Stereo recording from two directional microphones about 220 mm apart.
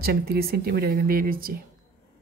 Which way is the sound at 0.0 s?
45° right (ahead or behind).